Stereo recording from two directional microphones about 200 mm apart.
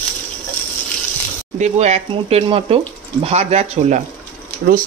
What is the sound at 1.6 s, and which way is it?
Speech, 35° right (ahead or behind).